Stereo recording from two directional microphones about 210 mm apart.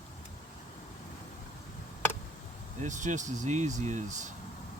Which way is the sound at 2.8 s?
35° right (ahead or behind).